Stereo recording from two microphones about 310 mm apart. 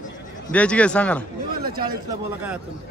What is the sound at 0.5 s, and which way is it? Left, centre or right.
Speech, centre.